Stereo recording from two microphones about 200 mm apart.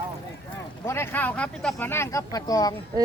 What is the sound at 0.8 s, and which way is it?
Speech, 10° left (ahead or behind).